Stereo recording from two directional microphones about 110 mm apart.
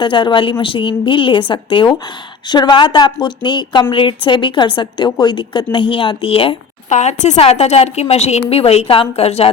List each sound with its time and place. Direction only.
0.0 s a woman's voice: 50° left (ahead or behind)
6.9 s a woman's voice: 90° left; by 9.5 s 65° left (ahead or behind)